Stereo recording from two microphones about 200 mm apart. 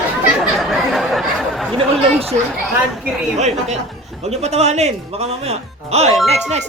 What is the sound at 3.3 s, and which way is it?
Speech, 35° right (ahead or behind).